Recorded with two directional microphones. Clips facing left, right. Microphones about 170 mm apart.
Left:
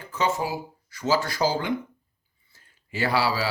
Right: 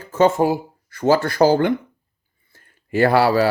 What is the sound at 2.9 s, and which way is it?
Speech, 55° right (ahead or behind).